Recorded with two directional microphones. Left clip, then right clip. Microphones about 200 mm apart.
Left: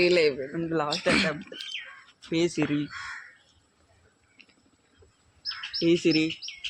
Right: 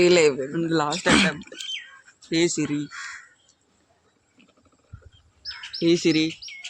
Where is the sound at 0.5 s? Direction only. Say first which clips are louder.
Right 4 dB; 55° right (ahead or behind).